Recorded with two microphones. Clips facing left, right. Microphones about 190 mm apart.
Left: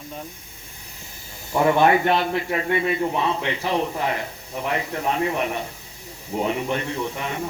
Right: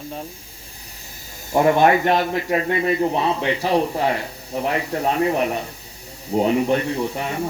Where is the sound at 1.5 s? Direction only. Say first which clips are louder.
Right 2 dB; 40° right (ahead or behind).